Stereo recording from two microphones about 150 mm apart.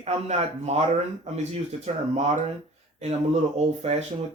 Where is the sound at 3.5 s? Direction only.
45° right (ahead or behind).